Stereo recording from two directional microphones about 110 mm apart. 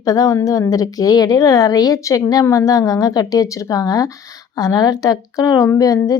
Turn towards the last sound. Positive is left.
turn(degrees=30)  # may be behind; listen again after turning